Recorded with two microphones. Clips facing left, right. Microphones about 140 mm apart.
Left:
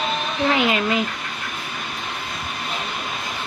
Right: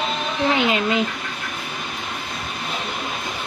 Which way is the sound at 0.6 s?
25° right (ahead or behind).